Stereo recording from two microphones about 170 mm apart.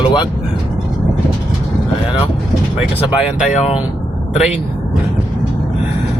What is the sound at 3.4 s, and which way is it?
Speech, 40° left (ahead or behind).